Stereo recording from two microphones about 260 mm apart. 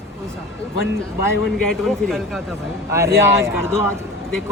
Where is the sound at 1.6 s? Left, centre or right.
Centre.